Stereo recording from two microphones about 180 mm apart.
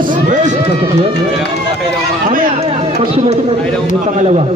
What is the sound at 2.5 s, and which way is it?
A man's voice, 35° right (ahead or behind).